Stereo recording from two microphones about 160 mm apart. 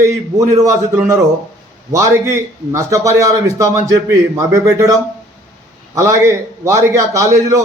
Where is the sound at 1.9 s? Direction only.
20° right (ahead or behind).